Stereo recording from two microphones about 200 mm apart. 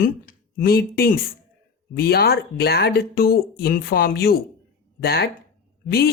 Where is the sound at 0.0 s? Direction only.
45° left (ahead or behind).